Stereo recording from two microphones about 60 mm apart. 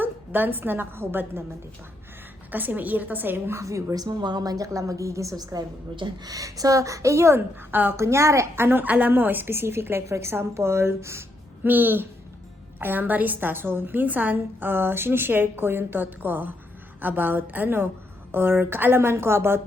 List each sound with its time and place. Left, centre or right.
0.0 s a woman's voice: right
2.5 s a woman's voice: right
3.6 s speech: right
3.9 s a woman's voice: right
7.7 s a woman's voice: right
7.9 s a woman's voice: right
8.8 s a woman's voice: right
11.6 s a woman's voice: right